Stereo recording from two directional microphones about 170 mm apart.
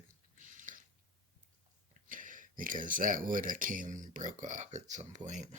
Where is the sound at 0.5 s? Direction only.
50° right (ahead or behind).